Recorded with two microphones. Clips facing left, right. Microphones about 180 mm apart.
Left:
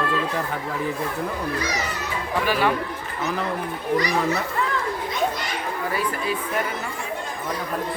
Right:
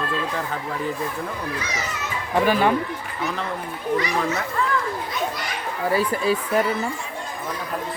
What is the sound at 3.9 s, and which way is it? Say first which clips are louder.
Speech: left 2 dB; 35° left (ahead or behind).